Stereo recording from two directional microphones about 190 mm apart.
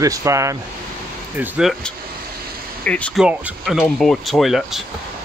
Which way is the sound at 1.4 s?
Centre (ahead or behind).